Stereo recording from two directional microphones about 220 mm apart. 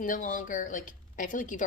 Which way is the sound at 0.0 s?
35° left (ahead or behind).